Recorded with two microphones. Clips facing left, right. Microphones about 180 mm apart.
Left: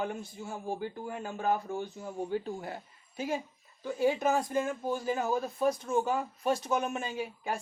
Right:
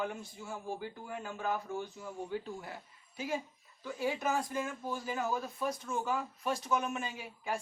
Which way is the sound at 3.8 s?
30° left (ahead or behind).